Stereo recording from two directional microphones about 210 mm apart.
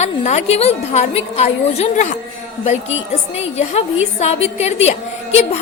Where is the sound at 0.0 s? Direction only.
30° left (ahead or behind).